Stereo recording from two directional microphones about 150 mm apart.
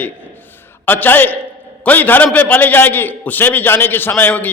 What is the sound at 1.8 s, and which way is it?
A man's voice, 10° left (ahead or behind).